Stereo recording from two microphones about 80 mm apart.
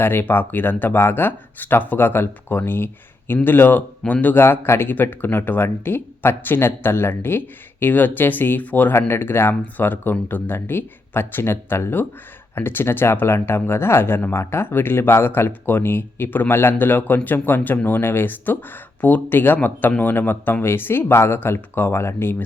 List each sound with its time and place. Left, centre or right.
0.0 s speech: left